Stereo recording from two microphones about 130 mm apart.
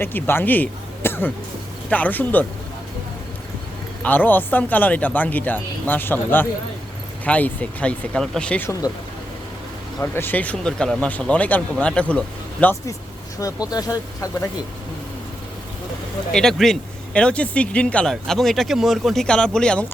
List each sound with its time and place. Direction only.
0.0 s speech: 15° left (ahead or behind)
4.0 s speech: 15° left (ahead or behind)
10.0 s speech: 15° left (ahead or behind)
13.4 s speech: 30° left (ahead or behind)
16.3 s speech: 5° left (ahead or behind)